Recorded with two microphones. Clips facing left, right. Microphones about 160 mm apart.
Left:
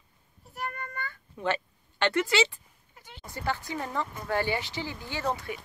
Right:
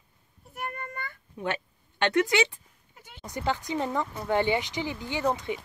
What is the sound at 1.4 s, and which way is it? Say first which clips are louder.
Speech: left 2 dB; 15° right (ahead or behind).